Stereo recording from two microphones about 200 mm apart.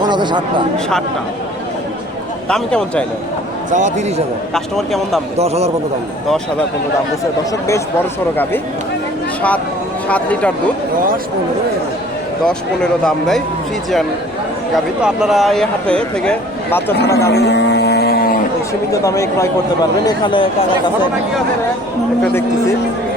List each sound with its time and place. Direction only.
0.1 s speech: 20° right (ahead or behind)
2.5 s speech: 5° left (ahead or behind)
3.7 s a man's voice: 35° right (ahead or behind)
4.5 s speech: centre (ahead or behind)
5.4 s a man's voice: 30° right (ahead or behind)
10.1 s speech: 5° left (ahead or behind)
12.5 s speech: 5° left (ahead or behind)
15.0 s speech: centre (ahead or behind)
17.2 s vehicle: 55° left (ahead or behind)
18.9 s speech: 15° left (ahead or behind)